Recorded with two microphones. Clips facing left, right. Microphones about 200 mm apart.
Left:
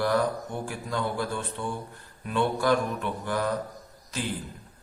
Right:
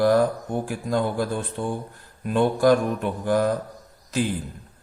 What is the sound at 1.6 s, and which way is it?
Mantra, 45° right (ahead or behind).